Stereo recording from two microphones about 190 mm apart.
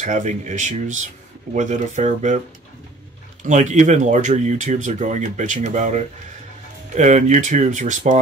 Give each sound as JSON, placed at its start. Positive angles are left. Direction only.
{"t": 0.0, "sound": "speech", "side_deg": -40}
{"t": 3.4, "sound": "speech", "side_deg": -40}